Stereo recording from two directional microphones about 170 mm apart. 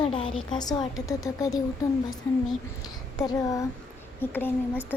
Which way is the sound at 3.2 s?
20° left (ahead or behind).